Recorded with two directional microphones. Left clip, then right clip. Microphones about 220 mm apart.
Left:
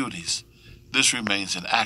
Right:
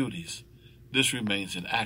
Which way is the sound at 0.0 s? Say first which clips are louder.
Left 6 dB; 30° left (ahead or behind).